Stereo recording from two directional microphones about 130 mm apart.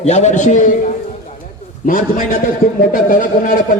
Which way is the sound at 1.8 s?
90° left.